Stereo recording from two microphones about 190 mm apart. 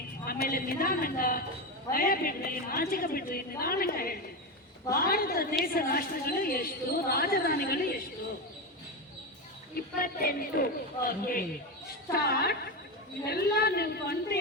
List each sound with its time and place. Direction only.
0.3 s a woman's voice: 50° left (ahead or behind)
10.0 s a woman's voice: 50° left (ahead or behind)